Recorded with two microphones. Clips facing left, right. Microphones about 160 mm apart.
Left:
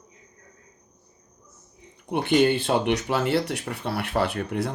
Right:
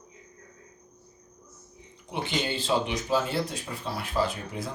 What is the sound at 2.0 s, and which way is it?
Speech, 55° left (ahead or behind).